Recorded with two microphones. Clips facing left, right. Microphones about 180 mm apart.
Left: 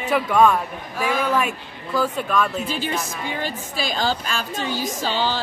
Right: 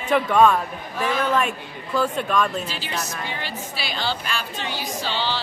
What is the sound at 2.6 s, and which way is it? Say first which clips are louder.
A woman's voice: left 4 dB; 50° left (ahead or behind).